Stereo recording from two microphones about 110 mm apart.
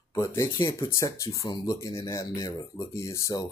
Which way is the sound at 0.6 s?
30° left (ahead or behind).